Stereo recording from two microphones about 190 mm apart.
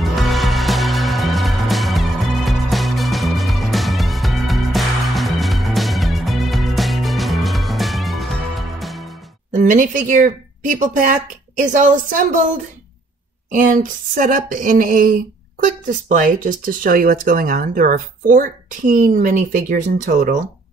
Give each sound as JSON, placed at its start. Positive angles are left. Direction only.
{"t": 0.0, "sound": "music", "side_deg": 0}
{"t": 9.5, "sound": "speech", "side_deg": -40}